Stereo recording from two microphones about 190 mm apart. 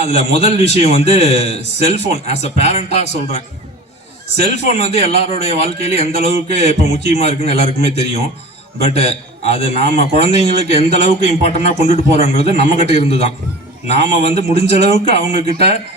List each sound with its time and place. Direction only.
0.0 s a man's voice: 35° left (ahead or behind)